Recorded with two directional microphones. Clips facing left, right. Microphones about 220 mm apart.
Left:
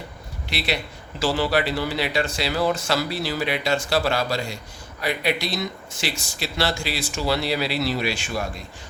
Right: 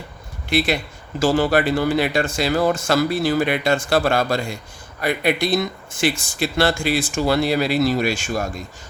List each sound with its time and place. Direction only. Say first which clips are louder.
0.5 s speech: right 7 dB; 50° right (ahead or behind)